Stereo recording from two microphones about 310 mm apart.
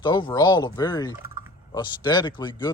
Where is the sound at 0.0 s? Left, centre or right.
Centre.